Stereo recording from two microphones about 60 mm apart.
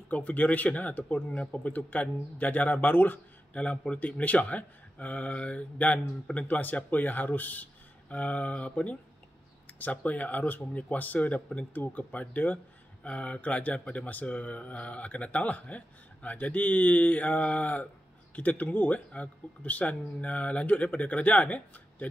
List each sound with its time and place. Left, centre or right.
0.1 s speech: left